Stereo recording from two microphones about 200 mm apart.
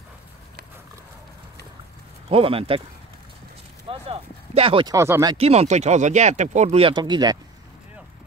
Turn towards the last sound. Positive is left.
turn(degrees=-20)  # may be behind; listen again after turning